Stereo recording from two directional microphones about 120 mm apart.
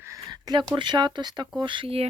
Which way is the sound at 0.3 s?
35° right (ahead or behind).